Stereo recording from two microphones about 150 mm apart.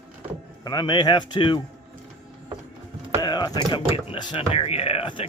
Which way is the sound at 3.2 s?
25° left (ahead or behind).